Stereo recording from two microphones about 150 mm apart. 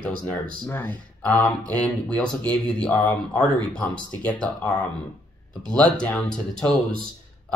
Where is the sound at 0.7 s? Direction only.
15° left (ahead or behind).